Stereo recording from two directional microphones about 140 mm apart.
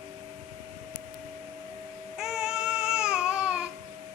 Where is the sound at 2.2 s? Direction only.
5° right (ahead or behind).